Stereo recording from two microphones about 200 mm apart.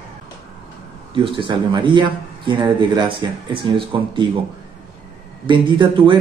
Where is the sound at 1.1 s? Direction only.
25° right (ahead or behind).